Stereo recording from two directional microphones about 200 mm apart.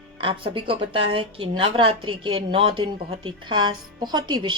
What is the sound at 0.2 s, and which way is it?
A woman's voice, 25° right (ahead or behind).